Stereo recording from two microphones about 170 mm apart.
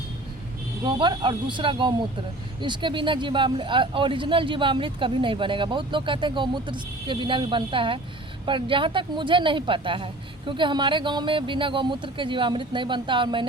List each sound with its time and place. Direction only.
0.9 s speech: 25° right (ahead or behind)